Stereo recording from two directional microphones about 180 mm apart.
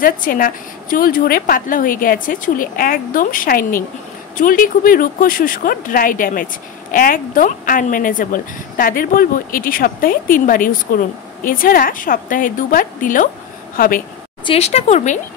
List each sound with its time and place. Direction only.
0.0 s speech: 50° left (ahead or behind)
14.4 s speech: 35° left (ahead or behind)